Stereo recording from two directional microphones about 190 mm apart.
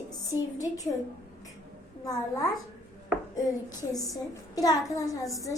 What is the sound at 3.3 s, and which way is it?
A woman's voice, 20° left (ahead or behind).